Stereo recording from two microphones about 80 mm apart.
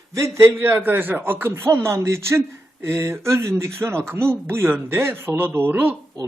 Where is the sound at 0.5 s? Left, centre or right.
Right.